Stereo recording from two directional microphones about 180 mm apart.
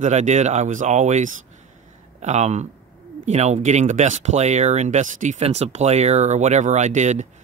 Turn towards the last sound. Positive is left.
turn(degrees=-40)  # may be behind; listen again after turning